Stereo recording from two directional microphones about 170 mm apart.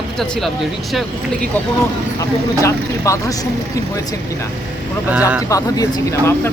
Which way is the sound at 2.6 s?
20° left (ahead or behind).